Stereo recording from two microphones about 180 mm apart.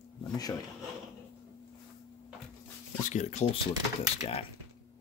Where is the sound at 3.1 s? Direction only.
40° left (ahead or behind).